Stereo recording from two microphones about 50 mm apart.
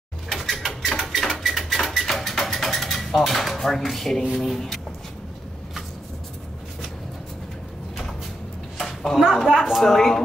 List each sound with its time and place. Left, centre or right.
0.3 s a sound: centre
4.3 s speech: centre
8.7 s a woman's voice: centre